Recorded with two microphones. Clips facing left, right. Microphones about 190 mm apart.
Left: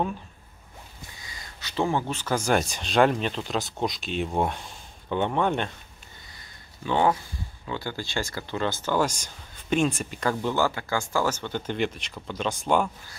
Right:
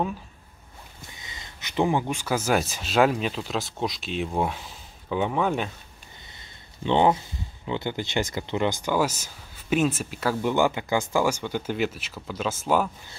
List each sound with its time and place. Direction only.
1.1 s speech: 20° right (ahead or behind); by 5.7 s 5° right (ahead or behind)
6.8 s speech: 20° right (ahead or behind); by 10.5 s 5° right (ahead or behind)
10.5 s speech: 15° right (ahead or behind)